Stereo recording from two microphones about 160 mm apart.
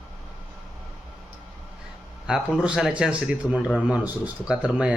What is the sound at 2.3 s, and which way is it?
Speech, 5° right (ahead or behind).